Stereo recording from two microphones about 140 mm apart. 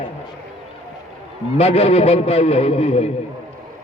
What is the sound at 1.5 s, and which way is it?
Speech, 45° left (ahead or behind).